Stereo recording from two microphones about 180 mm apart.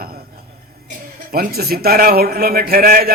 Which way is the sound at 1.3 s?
60° right (ahead or behind).